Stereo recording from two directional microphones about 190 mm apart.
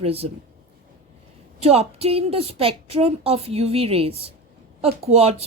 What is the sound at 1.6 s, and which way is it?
A woman's voice, 30° right (ahead or behind).